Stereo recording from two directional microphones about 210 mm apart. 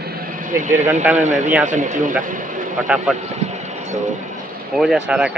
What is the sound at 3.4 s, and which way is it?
Vehicle, 35° right (ahead or behind).